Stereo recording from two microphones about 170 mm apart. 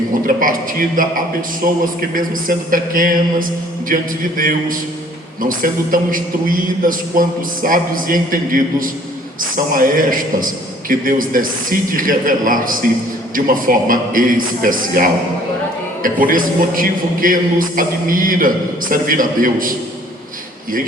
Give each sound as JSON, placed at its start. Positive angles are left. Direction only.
{"t": 0.3, "sound": "a man's voice", "side_deg": -55}
{"t": 16.2, "sound": "a man's voice", "side_deg": -55}